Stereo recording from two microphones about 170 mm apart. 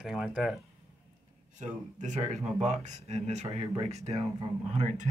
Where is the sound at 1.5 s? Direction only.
45° right (ahead or behind).